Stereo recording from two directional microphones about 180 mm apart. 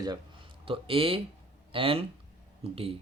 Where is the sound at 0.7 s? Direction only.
30° right (ahead or behind).